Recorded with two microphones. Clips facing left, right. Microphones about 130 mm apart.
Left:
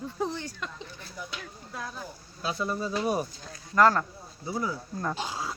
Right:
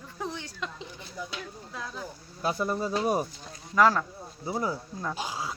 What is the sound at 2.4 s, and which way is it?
Speech, 45° right (ahead or behind).